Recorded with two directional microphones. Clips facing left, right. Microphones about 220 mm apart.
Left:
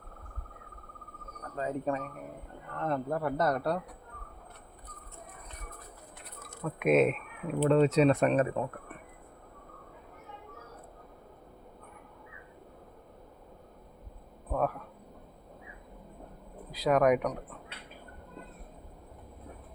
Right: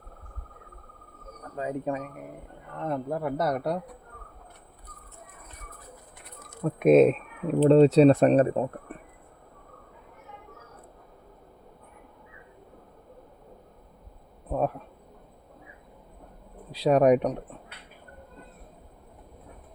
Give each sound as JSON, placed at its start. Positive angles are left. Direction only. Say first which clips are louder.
{"t": 1.5, "sound": "speech", "louder": "right 2 dB", "side_deg": -15}
{"t": 6.6, "sound": "speech", "louder": "right 7 dB", "side_deg": -35}
{"t": 14.5, "sound": "speech", "louder": "right 3 dB", "side_deg": -25}
{"t": 16.7, "sound": "speech", "louder": "right 5 dB", "side_deg": -30}